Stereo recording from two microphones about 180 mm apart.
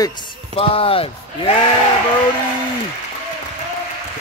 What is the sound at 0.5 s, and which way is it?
Speech, 30° left (ahead or behind).